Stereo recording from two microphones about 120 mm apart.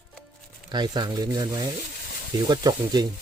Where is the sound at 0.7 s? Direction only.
35° right (ahead or behind).